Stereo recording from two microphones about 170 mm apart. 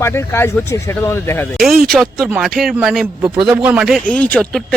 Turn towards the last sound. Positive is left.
turn(degrees=5)  # may be behind; listen again after turning